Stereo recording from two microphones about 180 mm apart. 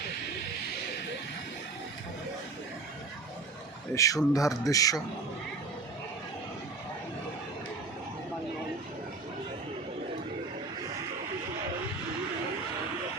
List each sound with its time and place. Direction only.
3.9 s a man's voice: 20° left (ahead or behind)